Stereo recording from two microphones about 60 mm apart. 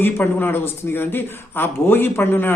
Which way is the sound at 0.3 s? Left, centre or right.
Left.